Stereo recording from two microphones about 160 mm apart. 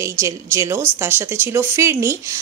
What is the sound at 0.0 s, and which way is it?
Speech, 15° right (ahead or behind).